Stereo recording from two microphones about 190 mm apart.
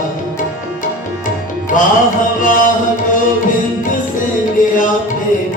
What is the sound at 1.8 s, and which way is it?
Music, 45° left (ahead or behind).